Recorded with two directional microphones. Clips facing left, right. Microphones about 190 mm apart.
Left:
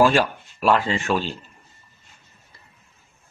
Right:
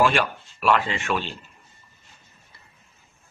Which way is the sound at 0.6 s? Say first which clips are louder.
Left 2 dB; 35° left (ahead or behind).